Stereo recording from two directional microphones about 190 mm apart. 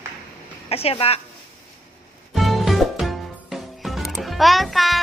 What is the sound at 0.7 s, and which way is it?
Speech, 30° left (ahead or behind).